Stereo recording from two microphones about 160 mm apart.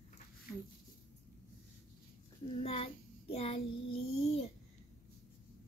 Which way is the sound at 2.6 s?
40° left (ahead or behind).